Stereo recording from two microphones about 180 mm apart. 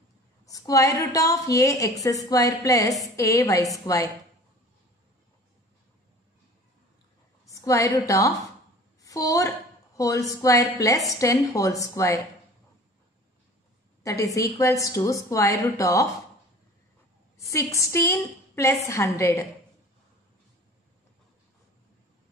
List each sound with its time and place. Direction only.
0.5 s a woman's voice: 20° left (ahead or behind)
7.4 s a woman's voice: 15° left (ahead or behind)
14.0 s a woman's voice: 15° left (ahead or behind)
17.4 s a woman's voice: 15° left (ahead or behind)